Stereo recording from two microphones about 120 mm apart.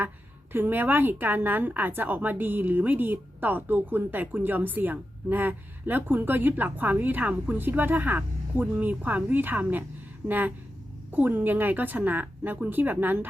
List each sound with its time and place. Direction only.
0.5 s a woman's voice: 15° right (ahead or behind)